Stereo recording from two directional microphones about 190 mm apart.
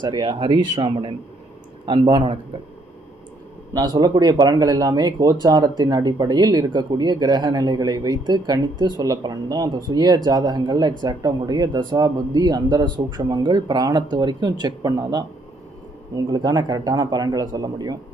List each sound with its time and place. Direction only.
0.0 s speech: 25° right (ahead or behind)
3.8 s speech: 20° right (ahead or behind)